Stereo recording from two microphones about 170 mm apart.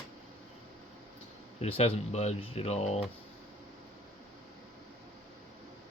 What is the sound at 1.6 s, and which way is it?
Speech, 40° left (ahead or behind).